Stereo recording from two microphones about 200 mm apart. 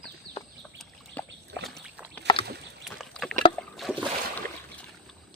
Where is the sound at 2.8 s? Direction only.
Centre (ahead or behind).